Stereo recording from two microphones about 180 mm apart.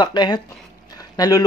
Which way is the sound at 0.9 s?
20° left (ahead or behind).